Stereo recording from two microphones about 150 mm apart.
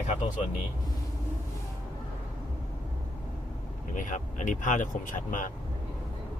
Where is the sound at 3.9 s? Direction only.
60° left (ahead or behind).